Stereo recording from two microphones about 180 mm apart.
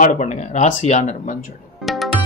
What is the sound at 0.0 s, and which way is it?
A man's voice, 45° left (ahead or behind).